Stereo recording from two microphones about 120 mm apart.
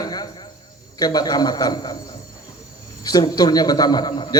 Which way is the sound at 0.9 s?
35° left (ahead or behind).